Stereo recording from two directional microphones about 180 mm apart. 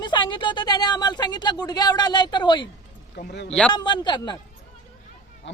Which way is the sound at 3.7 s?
25° left (ahead or behind).